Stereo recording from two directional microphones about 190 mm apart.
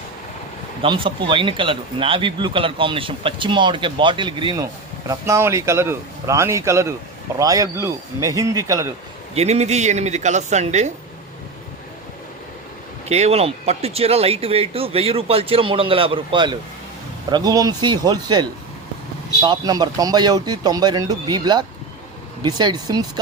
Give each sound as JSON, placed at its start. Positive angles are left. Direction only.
{"t": 0.8, "sound": "speech", "side_deg": -25}
{"t": 9.3, "sound": "speech", "side_deg": -35}
{"t": 13.1, "sound": "speech", "side_deg": -35}